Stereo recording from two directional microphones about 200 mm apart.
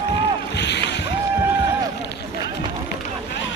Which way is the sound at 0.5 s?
60° left (ahead or behind).